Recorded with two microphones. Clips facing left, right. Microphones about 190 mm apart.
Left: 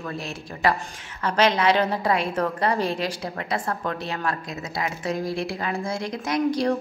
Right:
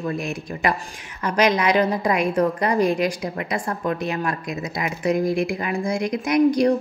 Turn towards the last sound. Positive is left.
turn(degrees=-15)  # may be behind; listen again after turning